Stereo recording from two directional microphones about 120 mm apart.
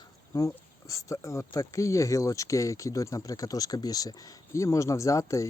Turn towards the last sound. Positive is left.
turn(degrees=25)  # may be behind; listen again after turning